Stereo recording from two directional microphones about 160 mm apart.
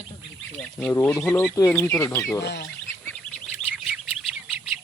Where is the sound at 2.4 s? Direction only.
90° left.